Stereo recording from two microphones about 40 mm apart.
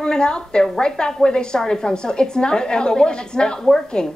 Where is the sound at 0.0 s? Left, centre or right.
Left.